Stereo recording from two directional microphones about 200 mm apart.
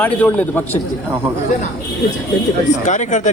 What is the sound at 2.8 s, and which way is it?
Speech, 35° left (ahead or behind).